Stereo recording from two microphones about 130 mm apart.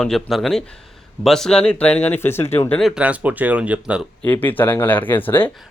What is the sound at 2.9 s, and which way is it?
Speech, 10° right (ahead or behind).